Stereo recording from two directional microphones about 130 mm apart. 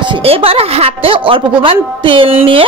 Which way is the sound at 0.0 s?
45° right (ahead or behind).